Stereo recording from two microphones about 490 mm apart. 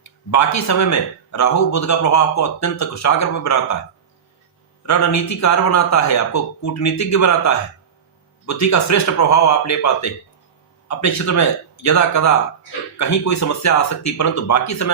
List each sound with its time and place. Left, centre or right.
0.0 s a man's voice: left
4.9 s a man's voice: left